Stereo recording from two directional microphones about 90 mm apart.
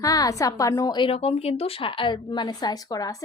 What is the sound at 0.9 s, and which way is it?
A woman's voice, 80° left.